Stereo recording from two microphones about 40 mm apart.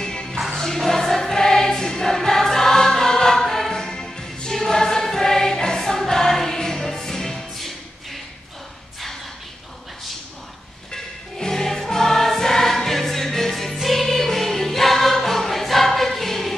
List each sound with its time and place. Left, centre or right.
0.0 s music: centre
0.6 s choir: centre
3.7 s music: centre
11.3 s music: centre